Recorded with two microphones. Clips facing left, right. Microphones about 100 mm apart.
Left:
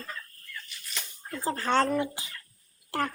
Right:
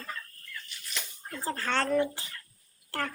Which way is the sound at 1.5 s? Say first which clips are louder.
Left 4 dB; 20° left (ahead or behind).